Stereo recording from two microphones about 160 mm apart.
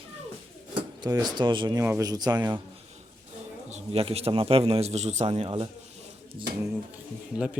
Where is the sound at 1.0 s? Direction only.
25° right (ahead or behind).